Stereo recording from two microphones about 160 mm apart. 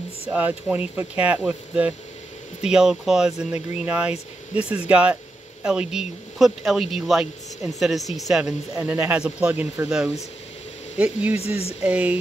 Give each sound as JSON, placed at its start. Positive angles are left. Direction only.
{"t": 0.3, "sound": "speech", "side_deg": -10}
{"t": 11.3, "sound": "speech", "side_deg": 40}
{"t": 11.8, "sound": "speech", "side_deg": -10}